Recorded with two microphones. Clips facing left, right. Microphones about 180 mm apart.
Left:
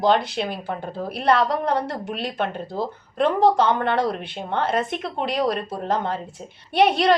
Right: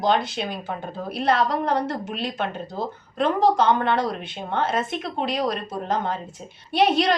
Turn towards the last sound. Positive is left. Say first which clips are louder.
# left 1 dB
turn(degrees=55)  # may be behind; listen again after turning